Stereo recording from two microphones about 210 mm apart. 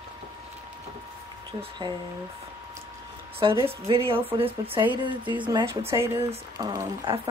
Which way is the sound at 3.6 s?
25° right (ahead or behind).